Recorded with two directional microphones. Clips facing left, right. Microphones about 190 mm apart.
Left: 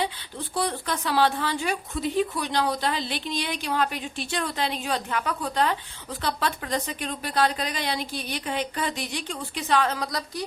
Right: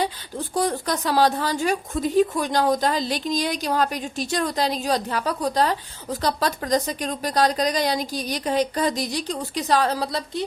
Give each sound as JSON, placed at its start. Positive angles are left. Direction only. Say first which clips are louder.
{"t": 0.0, "sound": "speech", "louder": "right 4 dB", "side_deg": -45}